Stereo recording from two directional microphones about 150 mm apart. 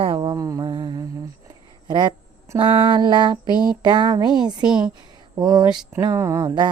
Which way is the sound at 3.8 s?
30° right (ahead or behind).